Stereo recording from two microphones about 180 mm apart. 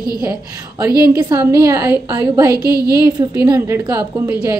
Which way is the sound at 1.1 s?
20° right (ahead or behind).